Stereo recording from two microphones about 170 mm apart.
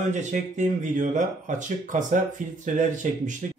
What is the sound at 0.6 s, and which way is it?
Speech, 50° right (ahead or behind).